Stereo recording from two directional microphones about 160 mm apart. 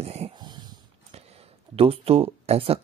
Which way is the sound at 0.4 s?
25° right (ahead or behind).